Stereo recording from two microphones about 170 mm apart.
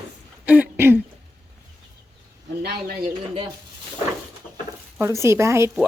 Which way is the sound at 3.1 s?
30° right (ahead or behind).